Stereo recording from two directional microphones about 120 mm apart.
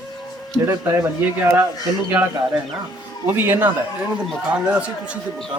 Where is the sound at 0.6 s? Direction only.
15° right (ahead or behind).